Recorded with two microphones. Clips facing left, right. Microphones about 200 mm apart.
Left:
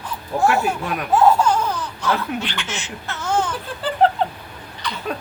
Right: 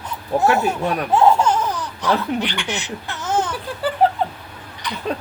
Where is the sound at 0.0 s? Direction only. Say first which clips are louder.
Right 1 dB; 20° right (ahead or behind).